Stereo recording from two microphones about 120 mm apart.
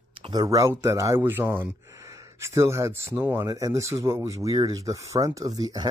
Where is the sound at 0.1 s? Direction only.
45° right (ahead or behind).